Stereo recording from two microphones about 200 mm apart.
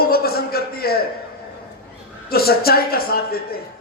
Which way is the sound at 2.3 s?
50° left (ahead or behind).